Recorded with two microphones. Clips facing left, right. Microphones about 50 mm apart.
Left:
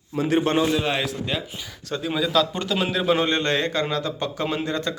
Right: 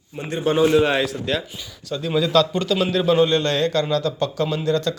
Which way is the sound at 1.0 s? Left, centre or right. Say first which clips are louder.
Right 3 dB; centre.